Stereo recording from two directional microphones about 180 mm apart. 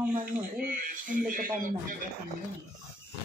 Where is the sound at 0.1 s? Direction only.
50° right (ahead or behind).